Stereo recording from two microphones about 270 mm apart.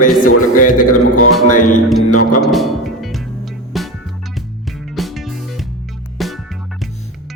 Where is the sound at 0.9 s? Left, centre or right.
Left.